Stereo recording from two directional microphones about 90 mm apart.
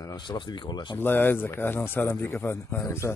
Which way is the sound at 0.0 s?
45° left (ahead or behind).